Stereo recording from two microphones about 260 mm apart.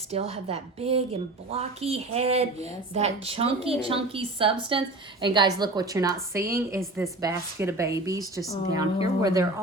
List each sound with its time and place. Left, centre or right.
0.1 s a woman's voice: right